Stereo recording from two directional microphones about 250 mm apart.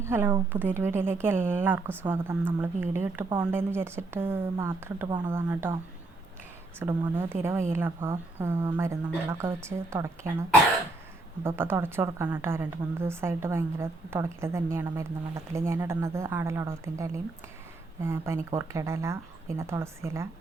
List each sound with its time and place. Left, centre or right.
0.0 s a woman's voice: centre
6.7 s a woman's voice: centre
11.4 s a woman's voice: centre